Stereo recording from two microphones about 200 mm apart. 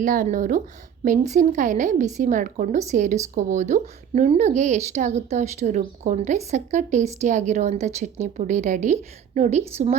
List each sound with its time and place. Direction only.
0.0 s a woman's voice: 40° right (ahead or behind)